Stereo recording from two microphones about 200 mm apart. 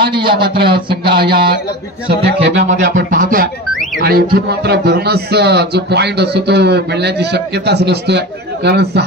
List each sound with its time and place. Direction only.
0.2 s speech: 50° right (ahead or behind)
3.1 s speech: 45° right (ahead or behind)